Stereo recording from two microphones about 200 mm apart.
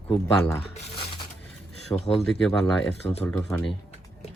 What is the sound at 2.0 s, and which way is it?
Speech, 30° left (ahead or behind).